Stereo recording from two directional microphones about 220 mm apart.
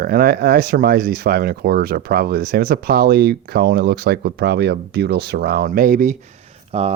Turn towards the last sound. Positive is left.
turn(degrees=-30)  # may be behind; listen again after turning